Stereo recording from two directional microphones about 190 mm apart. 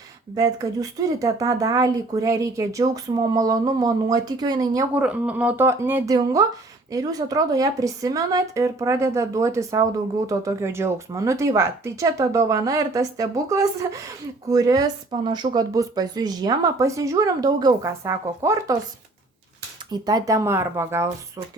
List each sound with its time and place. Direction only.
0.3 s speech: 20° right (ahead or behind)
4.9 s a woman's voice: 5° right (ahead or behind)
19.9 s a woman's voice: 20° right (ahead or behind)